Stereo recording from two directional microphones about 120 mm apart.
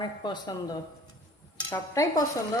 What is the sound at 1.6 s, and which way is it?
Stir, 25° left (ahead or behind).